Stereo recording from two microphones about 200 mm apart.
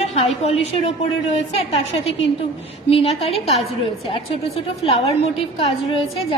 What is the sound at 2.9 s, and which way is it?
Speech, 30° left (ahead or behind).